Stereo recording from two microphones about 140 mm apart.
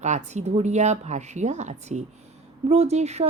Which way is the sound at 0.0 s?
55° right (ahead or behind).